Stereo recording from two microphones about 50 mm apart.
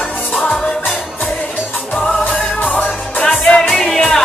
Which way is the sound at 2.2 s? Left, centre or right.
Left.